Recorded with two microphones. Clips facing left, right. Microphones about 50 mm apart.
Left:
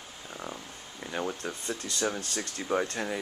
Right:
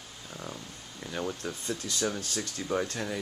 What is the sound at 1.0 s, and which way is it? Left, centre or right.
Speech, centre.